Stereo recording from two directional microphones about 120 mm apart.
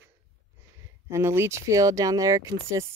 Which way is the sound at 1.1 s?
20° right (ahead or behind).